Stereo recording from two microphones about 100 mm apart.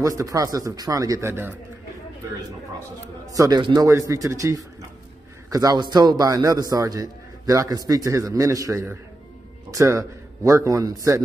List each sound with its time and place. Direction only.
0.0 s a man's voice: 35° right (ahead or behind)
3.3 s a man's voice: 35° right (ahead or behind)